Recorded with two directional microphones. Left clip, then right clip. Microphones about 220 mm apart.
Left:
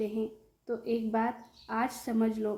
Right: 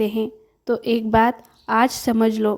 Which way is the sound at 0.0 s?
45° right (ahead or behind).